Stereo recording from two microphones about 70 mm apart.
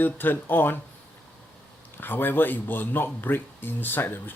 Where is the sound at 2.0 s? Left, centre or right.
Left.